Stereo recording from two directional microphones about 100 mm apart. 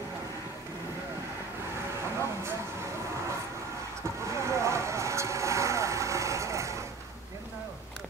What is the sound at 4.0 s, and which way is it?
Vehicle, 30° right (ahead or behind).